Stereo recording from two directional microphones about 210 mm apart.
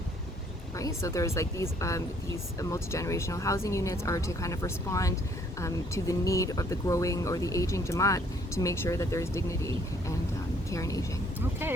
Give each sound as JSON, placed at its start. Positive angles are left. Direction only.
{"t": 0.8, "sound": "speech", "side_deg": 15}